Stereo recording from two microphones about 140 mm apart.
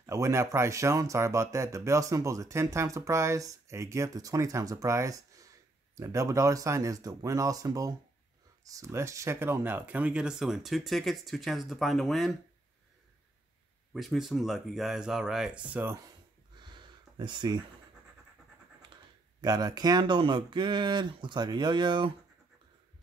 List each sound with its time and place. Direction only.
0.0 s speech: 20° right (ahead or behind); by 12.4 s centre (ahead or behind)
13.9 s speech: centre (ahead or behind)
16.5 s a sound: 35° right (ahead or behind)
19.4 s speech: 30° right (ahead or behind)